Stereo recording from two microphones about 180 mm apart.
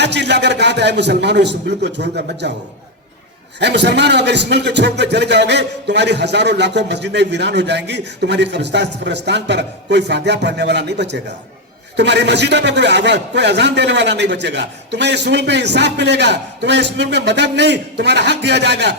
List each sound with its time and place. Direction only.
0.0 s a man's voice: 70° right (ahead or behind)
3.6 s a man's voice: 75° right (ahead or behind)